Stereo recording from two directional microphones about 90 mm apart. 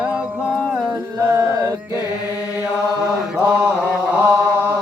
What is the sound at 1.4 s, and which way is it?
Chant, 30° right (ahead or behind).